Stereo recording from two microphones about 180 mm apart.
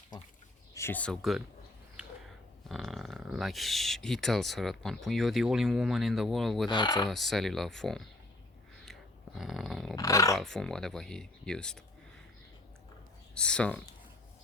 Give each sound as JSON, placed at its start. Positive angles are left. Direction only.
{"t": 0.7, "sound": "speech", "side_deg": 15}
{"t": 2.0, "sound": "a sound", "side_deg": -5}
{"t": 2.6, "sound": "speech", "side_deg": 0}
{"t": 6.7, "sound": "speech", "side_deg": 25}
{"t": 7.1, "sound": "speech", "side_deg": 0}
{"t": 9.4, "sound": "dog", "side_deg": 0}
{"t": 9.9, "sound": "a sound", "side_deg": 20}
{"t": 10.3, "sound": "speech", "side_deg": 0}
{"t": 13.3, "sound": "speech", "side_deg": 5}